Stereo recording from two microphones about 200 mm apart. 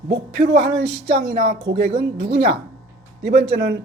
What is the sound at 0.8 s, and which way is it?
Speech, 55° right (ahead or behind).